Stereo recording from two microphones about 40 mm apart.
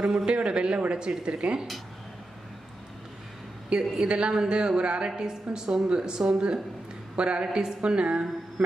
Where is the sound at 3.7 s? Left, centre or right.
Right.